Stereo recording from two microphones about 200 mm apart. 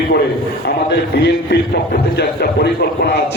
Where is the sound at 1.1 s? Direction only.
55° left (ahead or behind).